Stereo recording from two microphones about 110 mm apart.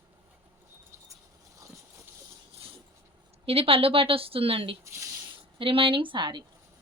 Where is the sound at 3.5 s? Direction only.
60° right (ahead or behind).